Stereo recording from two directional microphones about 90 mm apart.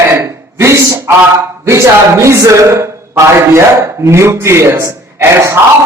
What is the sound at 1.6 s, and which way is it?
Speech, 30° right (ahead or behind).